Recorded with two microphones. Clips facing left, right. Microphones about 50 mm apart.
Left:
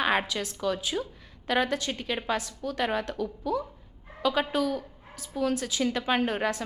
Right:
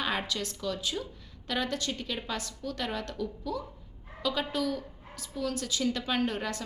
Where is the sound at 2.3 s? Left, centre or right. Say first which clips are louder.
Left 5 dB; centre.